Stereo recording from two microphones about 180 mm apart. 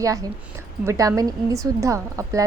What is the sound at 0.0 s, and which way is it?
A woman's voice, 20° right (ahead or behind).